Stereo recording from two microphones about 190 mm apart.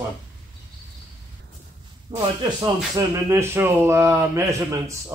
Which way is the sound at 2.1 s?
25° right (ahead or behind).